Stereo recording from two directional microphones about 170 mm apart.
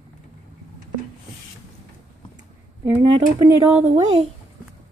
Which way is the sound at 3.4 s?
10° right (ahead or behind).